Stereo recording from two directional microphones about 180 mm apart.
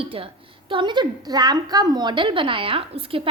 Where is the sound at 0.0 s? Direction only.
30° right (ahead or behind).